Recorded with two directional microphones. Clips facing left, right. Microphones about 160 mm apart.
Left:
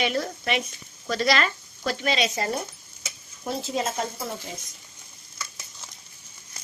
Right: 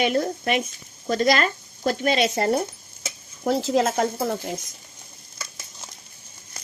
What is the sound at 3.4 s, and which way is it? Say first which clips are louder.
Speech: right 7 dB; 80° right.